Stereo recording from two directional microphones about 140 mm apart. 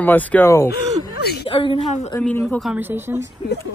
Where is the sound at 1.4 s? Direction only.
40° left (ahead or behind).